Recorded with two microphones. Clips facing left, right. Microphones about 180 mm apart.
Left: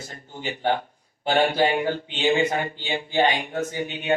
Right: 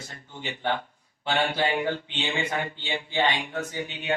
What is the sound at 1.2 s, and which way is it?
Speech, 40° left (ahead or behind).